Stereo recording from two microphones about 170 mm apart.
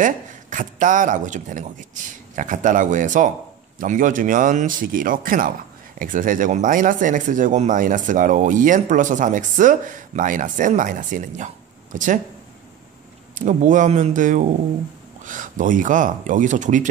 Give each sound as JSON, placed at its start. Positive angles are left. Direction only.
{"t": 0.0, "sound": "speech", "side_deg": -50}
{"t": 13.3, "sound": "speech", "side_deg": -45}